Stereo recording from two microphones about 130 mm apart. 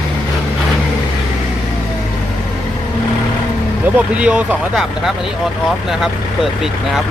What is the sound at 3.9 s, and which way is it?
Speech, 10° right (ahead or behind).